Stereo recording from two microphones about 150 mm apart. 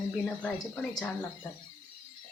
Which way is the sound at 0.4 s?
5° left (ahead or behind).